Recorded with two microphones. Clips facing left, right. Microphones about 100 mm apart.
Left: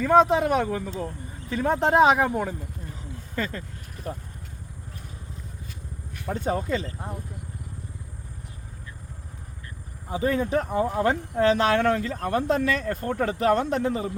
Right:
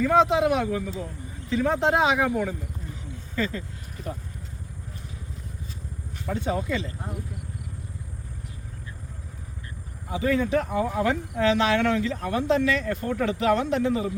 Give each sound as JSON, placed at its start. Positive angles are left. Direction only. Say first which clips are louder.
{"t": 0.0, "sound": "speech", "louder": "left 1 dB", "side_deg": 40}
{"t": 3.0, "sound": "a sound", "louder": "right 2 dB", "side_deg": 45}
{"t": 6.3, "sound": "speech", "louder": "left 1 dB", "side_deg": 45}
{"t": 10.1, "sound": "speech", "louder": "right 1 dB", "side_deg": 35}